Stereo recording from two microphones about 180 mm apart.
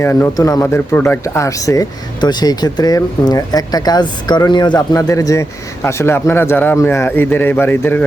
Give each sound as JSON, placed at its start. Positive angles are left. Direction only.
{"t": 0.0, "sound": "speech", "side_deg": 15}